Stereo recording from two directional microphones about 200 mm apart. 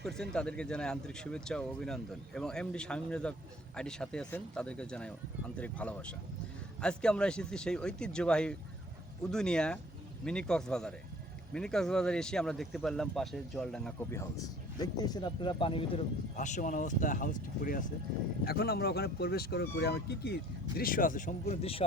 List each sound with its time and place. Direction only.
0.0 s speech: 5° left (ahead or behind)
14.2 s speech: 15° left (ahead or behind)
16.3 s speech: 40° left (ahead or behind)